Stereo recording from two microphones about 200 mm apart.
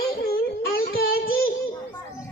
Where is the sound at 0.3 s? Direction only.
50° left (ahead or behind).